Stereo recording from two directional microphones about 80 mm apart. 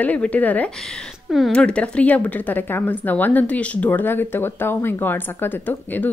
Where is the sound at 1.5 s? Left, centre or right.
Centre.